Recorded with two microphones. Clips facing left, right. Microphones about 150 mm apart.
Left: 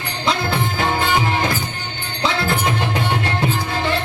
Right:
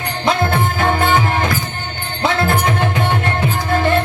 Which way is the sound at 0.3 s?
50° right (ahead or behind).